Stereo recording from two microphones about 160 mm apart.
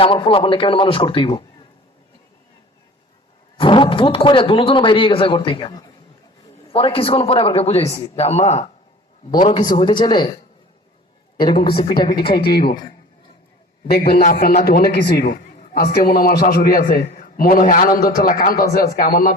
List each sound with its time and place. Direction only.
0.0 s speech: 35° left (ahead or behind)
3.6 s speech: 30° left (ahead or behind)
9.6 s speech: 25° left (ahead or behind)
11.3 s speech: 30° left (ahead or behind)
12.2 s a man's voice: 75° left (ahead or behind)
13.9 s a man's voice: 75° left (ahead or behind)
15.2 s a sound: 55° left (ahead or behind)
15.7 s a man's voice: 75° left (ahead or behind)